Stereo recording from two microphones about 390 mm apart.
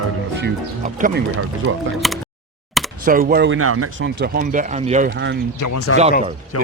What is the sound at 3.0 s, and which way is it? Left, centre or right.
Speech, right.